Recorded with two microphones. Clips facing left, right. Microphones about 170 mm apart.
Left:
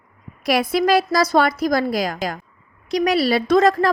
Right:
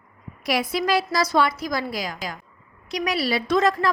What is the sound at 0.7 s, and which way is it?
A woman's voice, 45° left (ahead or behind).